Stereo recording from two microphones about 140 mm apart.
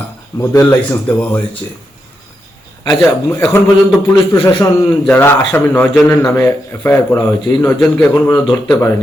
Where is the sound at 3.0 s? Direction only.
20° left (ahead or behind).